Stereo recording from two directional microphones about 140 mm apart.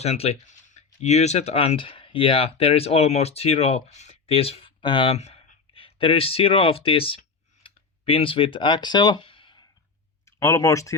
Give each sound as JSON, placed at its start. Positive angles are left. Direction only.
{"t": 0.0, "sound": "speech", "side_deg": 50}
{"t": 7.6, "sound": "a sound", "side_deg": 40}
{"t": 10.2, "sound": "speech", "side_deg": 20}